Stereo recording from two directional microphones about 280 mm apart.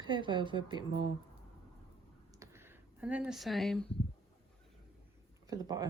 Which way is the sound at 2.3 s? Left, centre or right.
Centre.